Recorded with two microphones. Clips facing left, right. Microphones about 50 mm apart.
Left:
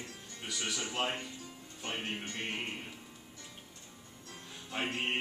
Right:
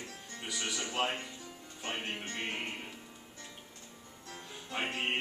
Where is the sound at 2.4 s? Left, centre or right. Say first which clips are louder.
Right 1 dB; centre.